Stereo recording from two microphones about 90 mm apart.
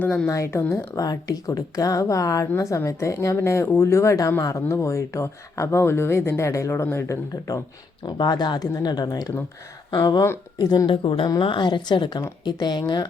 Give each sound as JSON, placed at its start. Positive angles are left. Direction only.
{"t": 0.3, "sound": "speech", "side_deg": 35}
{"t": 8.0, "sound": "speech", "side_deg": 50}
{"t": 10.8, "sound": "speech", "side_deg": 70}
{"t": 11.3, "sound": "a woman's voice", "side_deg": 60}